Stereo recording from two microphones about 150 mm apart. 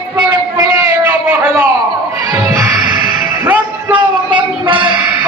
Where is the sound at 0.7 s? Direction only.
10° right (ahead or behind).